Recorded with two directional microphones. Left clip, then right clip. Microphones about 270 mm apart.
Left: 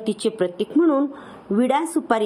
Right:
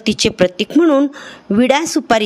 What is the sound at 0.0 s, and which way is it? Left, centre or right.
A woman's voice, right.